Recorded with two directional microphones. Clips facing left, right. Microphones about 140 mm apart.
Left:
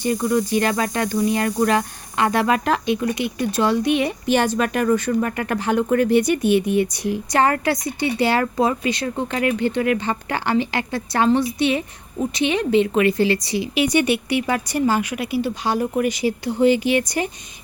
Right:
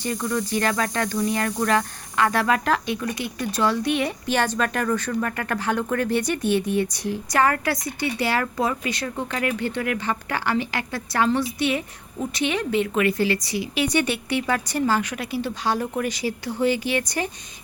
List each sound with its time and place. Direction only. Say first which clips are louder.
0.0 s speech: left 6 dB; 15° left (ahead or behind)
7.3 s a woman's voice: left 2 dB; 25° left (ahead or behind)